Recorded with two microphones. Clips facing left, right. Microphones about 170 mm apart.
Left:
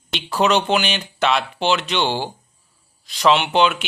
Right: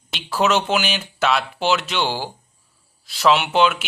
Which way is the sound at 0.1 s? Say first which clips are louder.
Left 1 dB; 5° right (ahead or behind).